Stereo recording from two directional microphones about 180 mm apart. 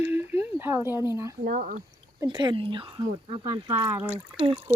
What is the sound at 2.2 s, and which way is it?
Speech, 25° right (ahead or behind).